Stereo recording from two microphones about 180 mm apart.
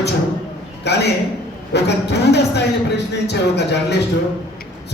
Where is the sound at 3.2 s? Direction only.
70° left (ahead or behind).